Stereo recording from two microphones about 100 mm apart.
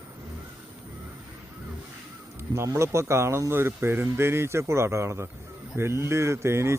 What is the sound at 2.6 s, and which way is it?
Speech, 30° right (ahead or behind).